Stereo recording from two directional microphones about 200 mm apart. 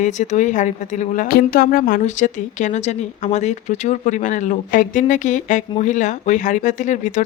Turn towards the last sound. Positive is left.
turn(degrees=35)  # may be behind; listen again after turning